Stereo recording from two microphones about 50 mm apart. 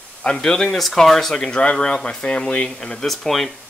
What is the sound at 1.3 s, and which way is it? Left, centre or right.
Speech, centre.